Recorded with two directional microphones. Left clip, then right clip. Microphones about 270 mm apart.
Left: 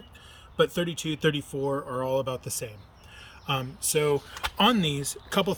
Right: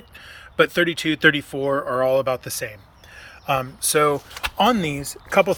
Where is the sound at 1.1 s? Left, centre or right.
Right.